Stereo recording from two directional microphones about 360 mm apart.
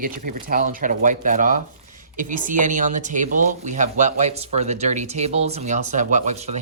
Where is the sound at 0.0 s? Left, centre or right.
Right.